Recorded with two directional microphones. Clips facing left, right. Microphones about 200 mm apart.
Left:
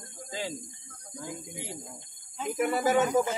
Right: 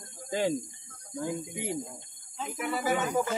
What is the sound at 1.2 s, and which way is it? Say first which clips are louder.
Speech: right 6 dB; 60° right (ahead or behind).